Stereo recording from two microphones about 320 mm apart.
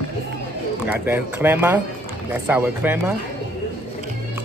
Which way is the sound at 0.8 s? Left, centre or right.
Centre.